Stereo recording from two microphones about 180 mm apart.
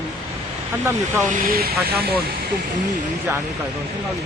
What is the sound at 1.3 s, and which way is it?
Speech, 55° right (ahead or behind).